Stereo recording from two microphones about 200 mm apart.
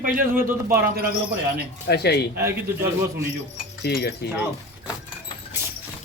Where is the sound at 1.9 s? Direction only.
55° left (ahead or behind).